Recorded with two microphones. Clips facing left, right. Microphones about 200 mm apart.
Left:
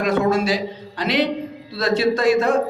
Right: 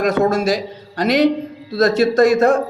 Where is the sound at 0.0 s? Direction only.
40° right (ahead or behind).